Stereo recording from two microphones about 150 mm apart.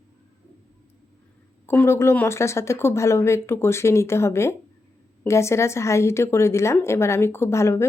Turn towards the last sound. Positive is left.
turn(degrees=20)  # may be behind; listen again after turning